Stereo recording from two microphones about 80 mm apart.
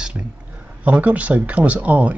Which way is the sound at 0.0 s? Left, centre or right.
Centre.